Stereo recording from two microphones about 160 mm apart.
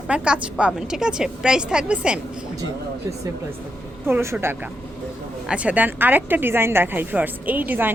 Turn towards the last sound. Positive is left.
turn(degrees=-10)  # may be behind; listen again after turning